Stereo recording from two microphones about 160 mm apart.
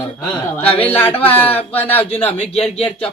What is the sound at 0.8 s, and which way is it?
Speech, 10° left (ahead or behind).